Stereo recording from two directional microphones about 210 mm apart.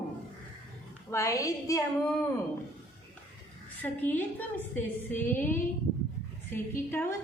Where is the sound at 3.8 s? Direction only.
10° left (ahead or behind).